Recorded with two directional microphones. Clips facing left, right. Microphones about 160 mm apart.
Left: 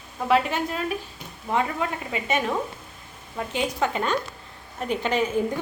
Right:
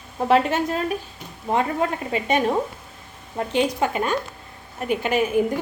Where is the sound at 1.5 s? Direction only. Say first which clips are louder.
Right 3 dB; 35° right (ahead or behind).